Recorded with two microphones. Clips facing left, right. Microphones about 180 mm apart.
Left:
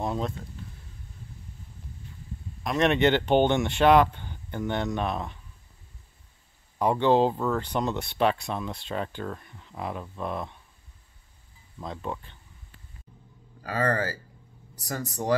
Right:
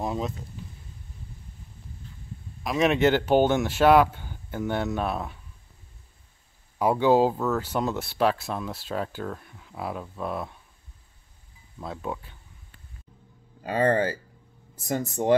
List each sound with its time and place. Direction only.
0.0 s a sound: centre (ahead or behind)
2.6 s speech: 5° right (ahead or behind)
6.8 s speech: 5° right (ahead or behind)
11.8 s speech: 5° right (ahead or behind)
13.6 s speech: 20° right (ahead or behind)